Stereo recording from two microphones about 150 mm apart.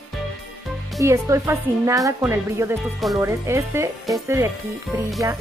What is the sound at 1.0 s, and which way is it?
Speech, 20° right (ahead or behind).